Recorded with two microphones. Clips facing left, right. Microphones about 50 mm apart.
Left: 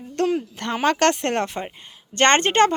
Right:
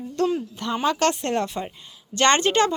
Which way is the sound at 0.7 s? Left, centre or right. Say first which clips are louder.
Left 3 dB; left.